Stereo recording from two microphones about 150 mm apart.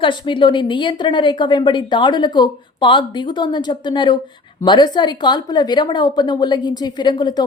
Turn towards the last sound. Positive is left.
turn(degrees=30)  # may be behind; listen again after turning